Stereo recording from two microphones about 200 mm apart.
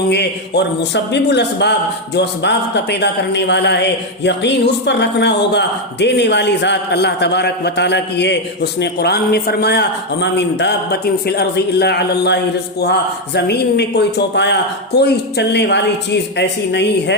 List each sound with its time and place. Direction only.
0.1 s speech: 55° left (ahead or behind)